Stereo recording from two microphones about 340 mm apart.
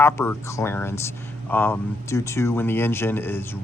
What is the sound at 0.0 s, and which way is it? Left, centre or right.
Speech, centre.